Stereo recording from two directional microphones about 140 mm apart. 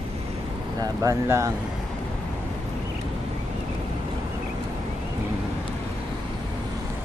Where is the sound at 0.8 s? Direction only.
20° right (ahead or behind).